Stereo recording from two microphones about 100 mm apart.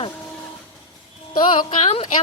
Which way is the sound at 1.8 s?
90° left.